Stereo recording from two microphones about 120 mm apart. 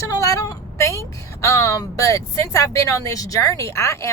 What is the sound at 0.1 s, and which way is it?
A woman's voice, 25° left (ahead or behind).